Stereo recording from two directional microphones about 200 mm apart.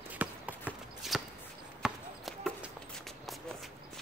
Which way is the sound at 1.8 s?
Centre (ahead or behind).